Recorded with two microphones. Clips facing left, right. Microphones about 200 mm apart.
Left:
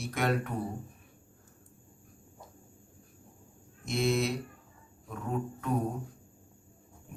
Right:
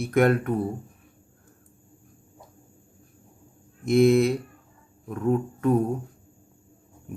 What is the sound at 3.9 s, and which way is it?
Speech, 55° right (ahead or behind).